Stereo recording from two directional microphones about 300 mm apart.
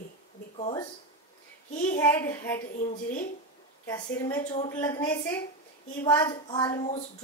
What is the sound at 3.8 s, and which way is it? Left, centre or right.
Speech, centre.